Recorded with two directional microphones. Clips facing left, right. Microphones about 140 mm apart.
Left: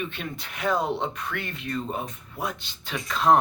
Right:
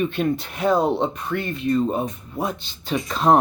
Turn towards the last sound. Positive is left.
turn(degrees=-35)  # may be behind; listen again after turning